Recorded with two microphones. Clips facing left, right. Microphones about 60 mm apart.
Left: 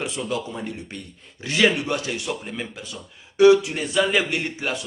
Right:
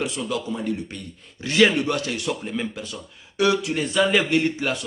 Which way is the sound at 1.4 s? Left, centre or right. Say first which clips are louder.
Right 2 dB; centre.